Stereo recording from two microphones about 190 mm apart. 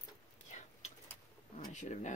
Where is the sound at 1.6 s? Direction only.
40° left (ahead or behind).